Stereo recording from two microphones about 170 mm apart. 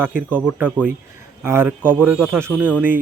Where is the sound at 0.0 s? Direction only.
10° right (ahead or behind).